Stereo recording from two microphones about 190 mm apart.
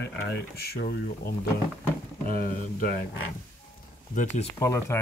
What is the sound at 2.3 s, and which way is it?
Speech, 50° left (ahead or behind).